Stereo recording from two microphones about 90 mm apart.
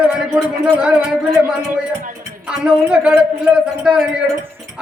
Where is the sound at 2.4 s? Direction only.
10° right (ahead or behind).